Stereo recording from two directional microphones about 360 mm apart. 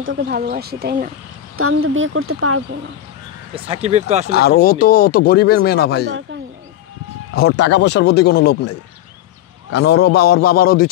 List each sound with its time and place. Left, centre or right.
0.0 s speech: right
1.6 s speech: right
3.5 s speech: centre
4.3 s speech: left
7.3 s speech: left
9.8 s speech: left